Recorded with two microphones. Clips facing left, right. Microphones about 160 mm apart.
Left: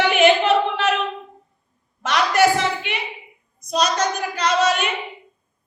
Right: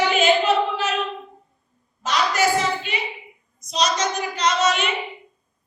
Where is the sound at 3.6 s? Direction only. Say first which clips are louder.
Left 2 dB; 55° left (ahead or behind).